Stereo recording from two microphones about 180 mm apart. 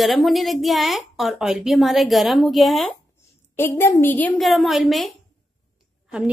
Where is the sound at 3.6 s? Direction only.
10° left (ahead or behind).